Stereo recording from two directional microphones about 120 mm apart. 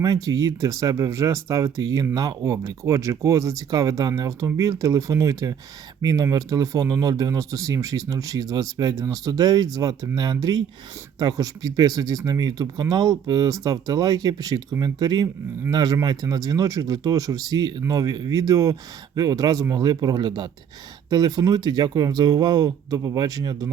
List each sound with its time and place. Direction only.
0.0 s speech: 30° right (ahead or behind)